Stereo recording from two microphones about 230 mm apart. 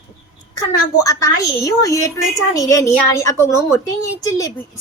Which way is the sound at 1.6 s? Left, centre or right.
Centre.